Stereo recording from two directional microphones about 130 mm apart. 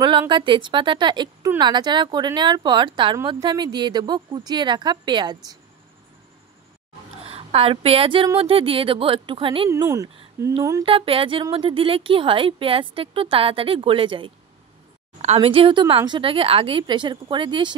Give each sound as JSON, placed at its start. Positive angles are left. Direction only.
{"t": 0.3, "sound": "a woman's voice", "side_deg": -40}
{"t": 7.2, "sound": "speech", "side_deg": -50}
{"t": 9.7, "sound": "speech", "side_deg": -25}
{"t": 10.9, "sound": "a woman's voice", "side_deg": -45}